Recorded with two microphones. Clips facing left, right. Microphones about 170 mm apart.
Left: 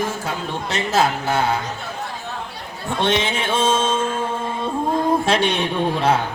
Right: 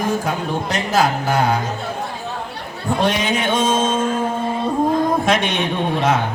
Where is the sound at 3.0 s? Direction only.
25° left (ahead or behind).